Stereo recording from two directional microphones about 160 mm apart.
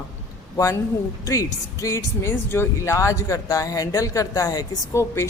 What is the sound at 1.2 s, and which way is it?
Speech, 20° left (ahead or behind).